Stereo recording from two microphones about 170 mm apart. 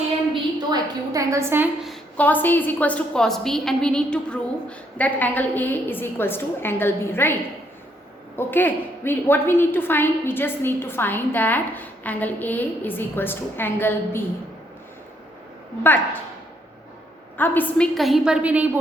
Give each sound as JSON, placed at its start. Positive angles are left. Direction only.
{"t": 0.7, "sound": "a woman's voice", "side_deg": -20}
{"t": 1.8, "sound": "a woman's voice", "side_deg": 5}
{"t": 8.4, "sound": "a woman's voice", "side_deg": 10}
{"t": 17.3, "sound": "a woman's voice", "side_deg": 10}